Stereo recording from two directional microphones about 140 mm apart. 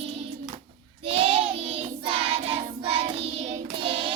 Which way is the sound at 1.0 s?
40° right (ahead or behind).